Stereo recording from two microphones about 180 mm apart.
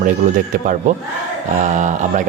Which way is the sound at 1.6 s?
40° right (ahead or behind).